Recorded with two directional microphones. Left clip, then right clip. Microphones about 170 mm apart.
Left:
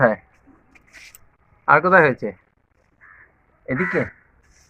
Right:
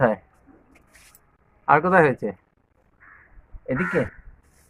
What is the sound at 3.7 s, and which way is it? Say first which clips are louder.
Speech: left 2 dB; 15° left (ahead or behind).